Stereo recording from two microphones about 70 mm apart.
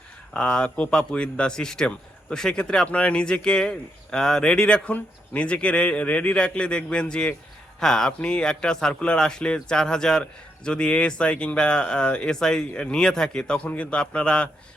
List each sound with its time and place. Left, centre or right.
0.3 s speech: centre